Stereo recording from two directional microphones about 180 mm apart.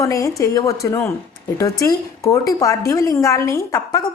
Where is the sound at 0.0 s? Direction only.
15° left (ahead or behind).